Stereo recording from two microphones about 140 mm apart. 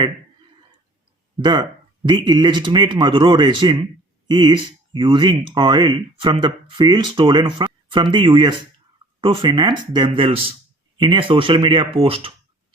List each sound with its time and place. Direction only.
1.4 s speech: 30° right (ahead or behind)